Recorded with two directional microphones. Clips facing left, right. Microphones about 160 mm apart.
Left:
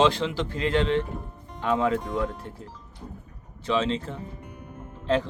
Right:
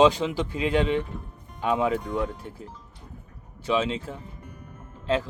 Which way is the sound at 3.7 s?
10° right (ahead or behind).